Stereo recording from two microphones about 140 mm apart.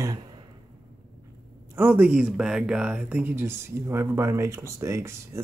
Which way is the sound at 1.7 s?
10° right (ahead or behind).